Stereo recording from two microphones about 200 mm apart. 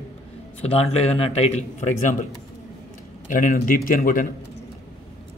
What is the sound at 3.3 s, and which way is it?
A man's voice, 40° left (ahead or behind).